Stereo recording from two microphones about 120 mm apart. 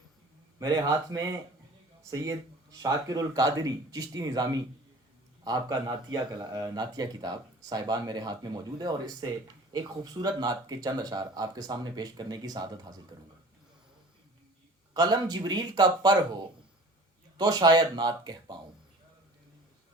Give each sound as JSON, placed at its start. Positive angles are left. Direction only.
{"t": 0.6, "sound": "speech", "side_deg": -30}
{"t": 14.9, "sound": "speech", "side_deg": -35}
{"t": 17.3, "sound": "speech", "side_deg": -35}